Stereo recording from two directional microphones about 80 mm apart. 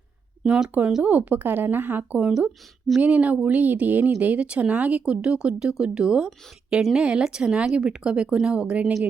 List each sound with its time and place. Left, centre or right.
0.4 s speech: centre